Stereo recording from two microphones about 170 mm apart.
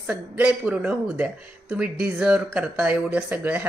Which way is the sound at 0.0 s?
5° right (ahead or behind).